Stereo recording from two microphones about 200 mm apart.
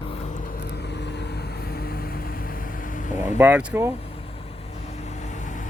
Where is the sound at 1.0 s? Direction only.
55° left (ahead or behind).